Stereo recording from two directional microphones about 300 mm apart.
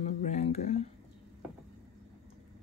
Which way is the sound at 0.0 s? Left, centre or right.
Left.